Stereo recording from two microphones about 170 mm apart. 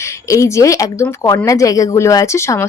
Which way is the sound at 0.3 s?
15° left (ahead or behind).